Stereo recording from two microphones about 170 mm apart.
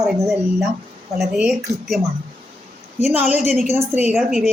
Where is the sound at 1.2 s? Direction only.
5° right (ahead or behind).